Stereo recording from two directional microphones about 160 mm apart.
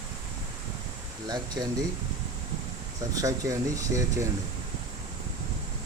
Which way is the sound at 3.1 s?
20° right (ahead or behind).